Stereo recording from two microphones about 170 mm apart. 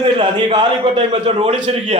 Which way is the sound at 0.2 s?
30° right (ahead or behind).